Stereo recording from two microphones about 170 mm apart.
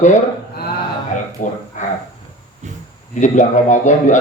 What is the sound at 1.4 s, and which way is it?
Speech, 45° left (ahead or behind).